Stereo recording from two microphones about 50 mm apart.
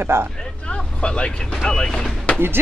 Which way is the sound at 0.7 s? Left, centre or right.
Left.